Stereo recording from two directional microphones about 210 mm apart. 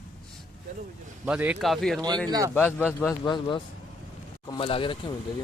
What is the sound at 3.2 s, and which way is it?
Speech, 20° left (ahead or behind).